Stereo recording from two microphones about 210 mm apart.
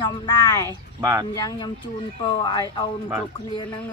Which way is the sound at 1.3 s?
15° left (ahead or behind).